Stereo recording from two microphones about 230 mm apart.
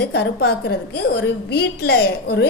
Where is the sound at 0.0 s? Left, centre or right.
Left.